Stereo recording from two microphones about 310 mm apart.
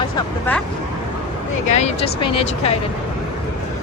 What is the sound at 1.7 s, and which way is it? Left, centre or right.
Speech, left.